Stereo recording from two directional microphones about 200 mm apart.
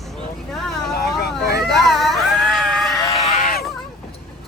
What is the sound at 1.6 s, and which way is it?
Screaming, centre (ahead or behind).